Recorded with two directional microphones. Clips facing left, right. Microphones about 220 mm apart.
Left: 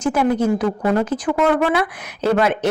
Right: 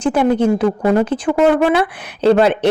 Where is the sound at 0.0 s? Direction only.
30° right (ahead or behind).